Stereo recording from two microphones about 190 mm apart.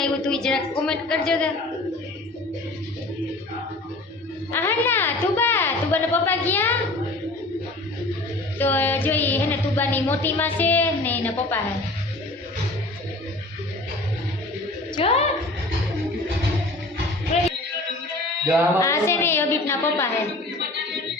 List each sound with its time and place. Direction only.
0.0 s a woman's voice: 5° left (ahead or behind)
4.5 s a woman's voice: 10° left (ahead or behind)
8.5 s a sound: 10° left (ahead or behind)
14.9 s a woman's voice: 30° left (ahead or behind)
17.3 s music: 35° left (ahead or behind)
18.8 s a sound: 15° left (ahead or behind)